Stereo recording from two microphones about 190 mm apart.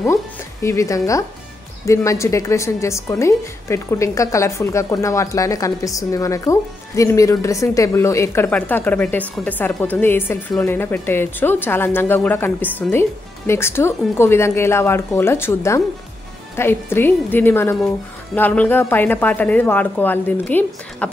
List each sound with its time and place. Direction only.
0.0 s a woman's voice: 15° left (ahead or behind)